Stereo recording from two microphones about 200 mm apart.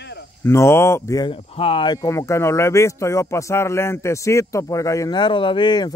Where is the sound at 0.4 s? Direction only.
15° left (ahead or behind).